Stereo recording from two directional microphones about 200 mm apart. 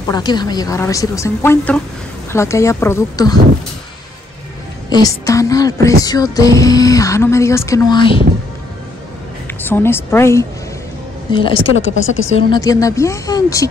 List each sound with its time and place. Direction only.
0.1 s music: 20° left (ahead or behind)
4.8 s music: 20° left (ahead or behind)
9.7 s music: 10° left (ahead or behind)
11.3 s a woman's voice: 25° left (ahead or behind)
11.6 s speech: 75° left (ahead or behind)
12.3 s a woman's voice: 30° left (ahead or behind)
12.5 s music: 15° left (ahead or behind)